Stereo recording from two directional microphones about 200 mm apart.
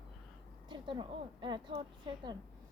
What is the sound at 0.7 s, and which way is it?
A woman's voice, 25° right (ahead or behind).